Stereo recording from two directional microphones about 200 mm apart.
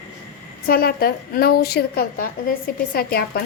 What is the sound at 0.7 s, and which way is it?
A woman's voice, 50° left (ahead or behind).